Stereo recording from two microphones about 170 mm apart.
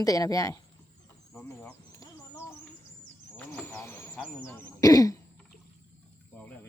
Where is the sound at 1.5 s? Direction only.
15° left (ahead or behind).